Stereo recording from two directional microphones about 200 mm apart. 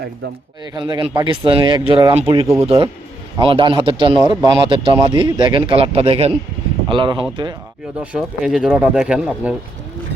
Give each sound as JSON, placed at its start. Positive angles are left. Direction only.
{"t": 0.7, "sound": "speech", "side_deg": -20}
{"t": 8.1, "sound": "speech", "side_deg": -5}